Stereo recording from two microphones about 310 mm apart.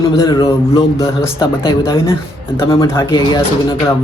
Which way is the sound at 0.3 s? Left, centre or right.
Centre.